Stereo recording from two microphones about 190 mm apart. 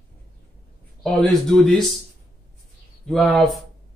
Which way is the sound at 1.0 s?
Centre (ahead or behind).